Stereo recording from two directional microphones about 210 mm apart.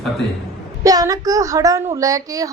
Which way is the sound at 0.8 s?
15° right (ahead or behind).